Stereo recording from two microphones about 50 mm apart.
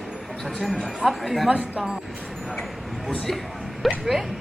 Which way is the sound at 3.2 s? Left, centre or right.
Centre.